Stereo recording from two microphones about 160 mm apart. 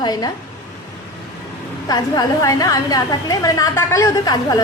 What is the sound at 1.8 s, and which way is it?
A woman's voice, 25° left (ahead or behind).